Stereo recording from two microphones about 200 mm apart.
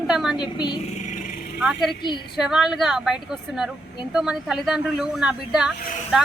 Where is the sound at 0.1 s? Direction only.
Centre (ahead or behind).